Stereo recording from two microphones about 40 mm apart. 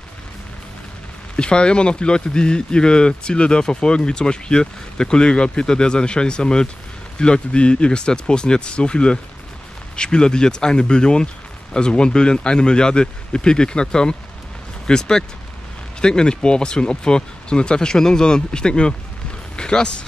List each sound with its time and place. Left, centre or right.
1.3 s speech: left